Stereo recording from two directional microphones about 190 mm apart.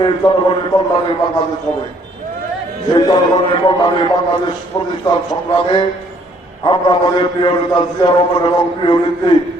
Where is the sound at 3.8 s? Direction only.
20° left (ahead or behind).